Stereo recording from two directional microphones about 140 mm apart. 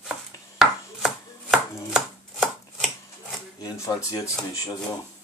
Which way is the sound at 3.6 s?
25° left (ahead or behind).